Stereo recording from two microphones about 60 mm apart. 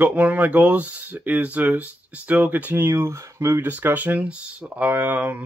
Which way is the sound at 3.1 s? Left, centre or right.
Right.